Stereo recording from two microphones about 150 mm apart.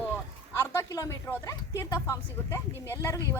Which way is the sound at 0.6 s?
20° left (ahead or behind).